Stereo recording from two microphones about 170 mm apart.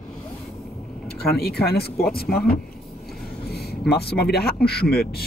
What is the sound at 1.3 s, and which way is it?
A man's voice, 70° left (ahead or behind).